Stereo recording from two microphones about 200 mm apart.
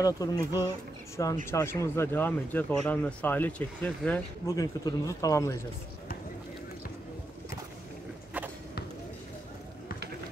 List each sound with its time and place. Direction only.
0.0 s speech: 15° left (ahead or behind)